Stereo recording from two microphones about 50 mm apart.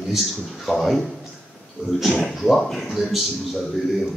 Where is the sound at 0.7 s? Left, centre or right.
Centre.